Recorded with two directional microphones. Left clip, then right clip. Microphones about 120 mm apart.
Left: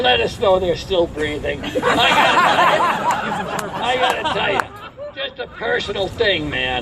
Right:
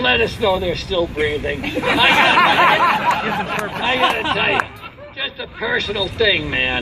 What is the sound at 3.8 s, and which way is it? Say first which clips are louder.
Speech: right 1 dB; 40° left (ahead or behind).